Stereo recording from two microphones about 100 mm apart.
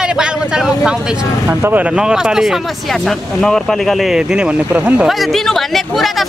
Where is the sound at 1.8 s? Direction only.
5° right (ahead or behind).